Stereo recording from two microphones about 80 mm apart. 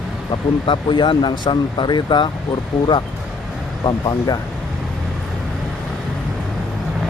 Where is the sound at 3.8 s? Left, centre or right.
Left.